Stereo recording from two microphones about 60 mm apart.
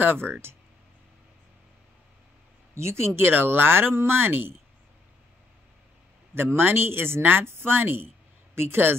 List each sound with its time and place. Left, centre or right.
0.0 s speech: right
2.7 s speech: right
6.3 s speech: right